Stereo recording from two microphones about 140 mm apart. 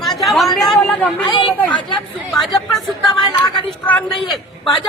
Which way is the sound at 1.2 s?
35° left (ahead or behind).